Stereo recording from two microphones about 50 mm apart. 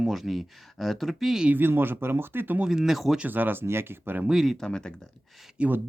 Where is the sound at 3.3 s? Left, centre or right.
Right.